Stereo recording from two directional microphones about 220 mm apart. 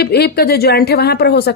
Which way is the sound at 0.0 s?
45° left (ahead or behind).